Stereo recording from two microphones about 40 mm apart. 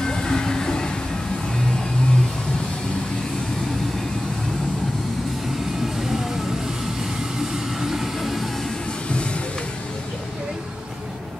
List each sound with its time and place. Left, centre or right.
0.0 s music: centre
7.3 s train: centre